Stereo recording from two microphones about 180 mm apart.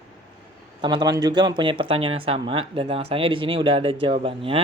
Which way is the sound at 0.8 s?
25° right (ahead or behind).